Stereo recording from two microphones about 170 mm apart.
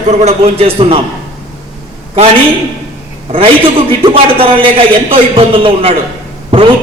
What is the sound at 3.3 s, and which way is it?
A man's voice, 35° right (ahead or behind).